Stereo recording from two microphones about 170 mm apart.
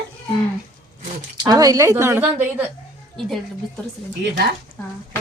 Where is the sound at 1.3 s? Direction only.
20° right (ahead or behind).